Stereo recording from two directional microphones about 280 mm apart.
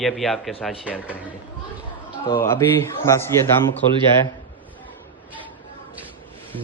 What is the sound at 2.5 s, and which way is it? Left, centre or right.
Speech, centre.